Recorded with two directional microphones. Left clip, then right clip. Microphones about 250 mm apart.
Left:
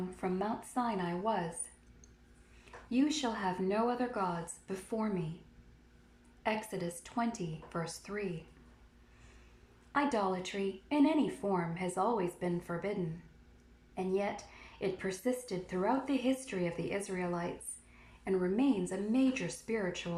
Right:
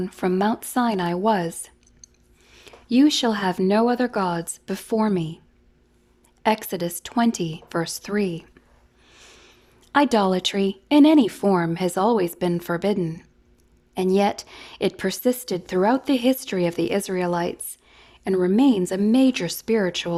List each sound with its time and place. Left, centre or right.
0.2 s speech: right
2.9 s a woman's voice: right
6.7 s speech: right
9.9 s speech: right
12.2 s speech: right
13.9 s speech: right
14.5 s a woman's voice: right
18.3 s speech: right